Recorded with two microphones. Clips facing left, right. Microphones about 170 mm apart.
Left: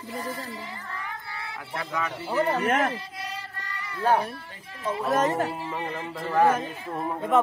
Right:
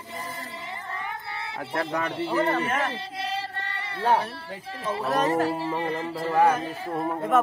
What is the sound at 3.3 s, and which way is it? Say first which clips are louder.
Chant: right 6 dB; 30° right (ahead or behind).